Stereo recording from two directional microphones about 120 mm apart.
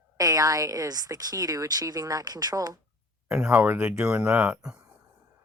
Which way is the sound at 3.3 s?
10° right (ahead or behind).